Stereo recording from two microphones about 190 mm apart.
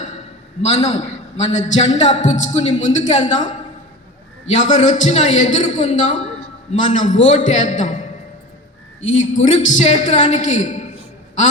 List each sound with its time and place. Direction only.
0.6 s a man's voice: 35° left (ahead or behind)
9.4 s a man's voice: 40° left (ahead or behind)